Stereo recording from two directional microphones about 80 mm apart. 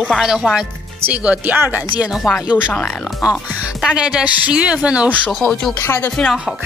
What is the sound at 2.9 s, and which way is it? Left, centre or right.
Speech, centre.